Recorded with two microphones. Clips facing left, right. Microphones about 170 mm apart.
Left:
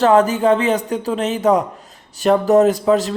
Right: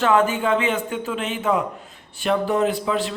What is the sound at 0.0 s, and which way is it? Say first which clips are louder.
Speech: left 5 dB; 40° left (ahead or behind).